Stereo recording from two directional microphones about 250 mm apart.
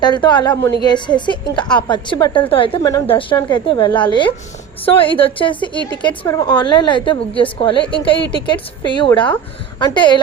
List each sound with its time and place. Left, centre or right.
0.0 s a woman's voice: centre